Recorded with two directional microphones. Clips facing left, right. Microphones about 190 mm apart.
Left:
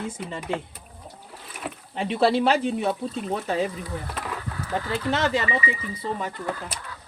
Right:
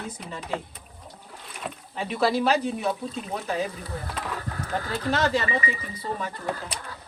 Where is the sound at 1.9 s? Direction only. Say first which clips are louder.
Left 3 dB; 25° left (ahead or behind).